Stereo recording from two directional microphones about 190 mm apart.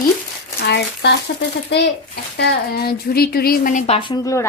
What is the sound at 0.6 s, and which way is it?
A woman's voice, 60° left (ahead or behind).